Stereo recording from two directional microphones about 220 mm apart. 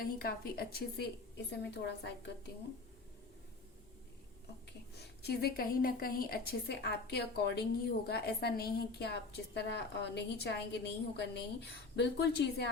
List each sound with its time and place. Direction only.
0.0 s a woman's voice: 45° left (ahead or behind)
4.9 s a woman's voice: 45° left (ahead or behind)